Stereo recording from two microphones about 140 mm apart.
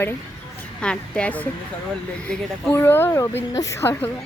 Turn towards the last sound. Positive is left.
turn(degrees=15)  # may be behind; listen again after turning